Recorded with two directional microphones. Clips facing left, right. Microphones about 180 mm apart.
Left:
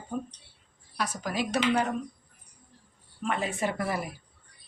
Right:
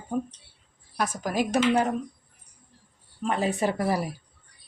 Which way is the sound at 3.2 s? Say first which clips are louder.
Right 4 dB; 35° right (ahead or behind).